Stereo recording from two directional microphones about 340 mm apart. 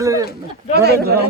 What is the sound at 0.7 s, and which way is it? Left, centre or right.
Speech, right.